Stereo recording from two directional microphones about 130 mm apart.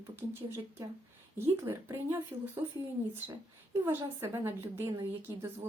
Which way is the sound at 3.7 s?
15° right (ahead or behind).